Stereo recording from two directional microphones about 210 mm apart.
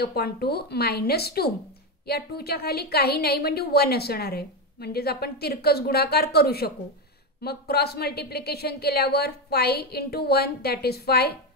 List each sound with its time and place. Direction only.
0.0 s a woman's voice: 50° left (ahead or behind)